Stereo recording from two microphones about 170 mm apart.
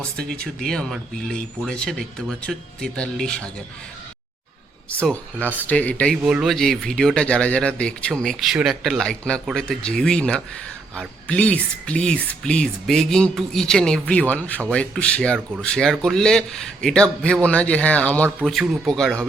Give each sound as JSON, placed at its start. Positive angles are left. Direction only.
{"t": 0.2, "sound": "speech", "side_deg": -65}
{"t": 0.6, "sound": "speech", "side_deg": 5}
{"t": 5.5, "sound": "speech", "side_deg": 10}